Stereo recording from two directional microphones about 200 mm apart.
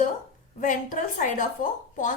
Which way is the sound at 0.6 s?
40° left (ahead or behind).